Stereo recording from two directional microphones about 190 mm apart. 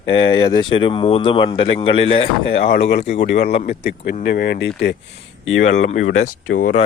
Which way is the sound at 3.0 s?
35° left (ahead or behind).